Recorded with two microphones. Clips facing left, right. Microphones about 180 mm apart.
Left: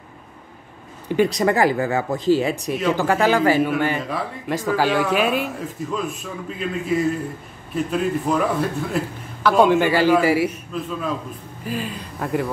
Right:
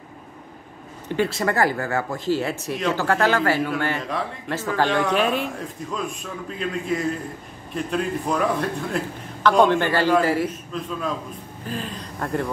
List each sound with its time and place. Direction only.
1.0 s a man's voice: 15° left (ahead or behind)